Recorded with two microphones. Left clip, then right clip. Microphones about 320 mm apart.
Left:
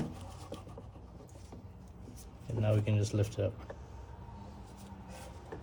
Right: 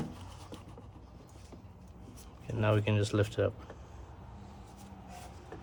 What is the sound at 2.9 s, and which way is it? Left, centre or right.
Speech, right.